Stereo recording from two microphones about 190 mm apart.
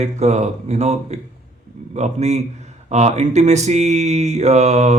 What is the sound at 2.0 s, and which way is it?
Speech, 35° right (ahead or behind).